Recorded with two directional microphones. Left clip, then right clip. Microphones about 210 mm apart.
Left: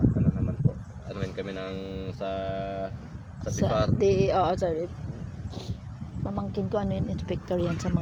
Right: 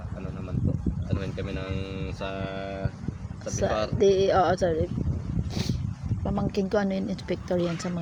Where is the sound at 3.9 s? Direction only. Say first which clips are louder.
Right 4 dB; 5° right (ahead or behind).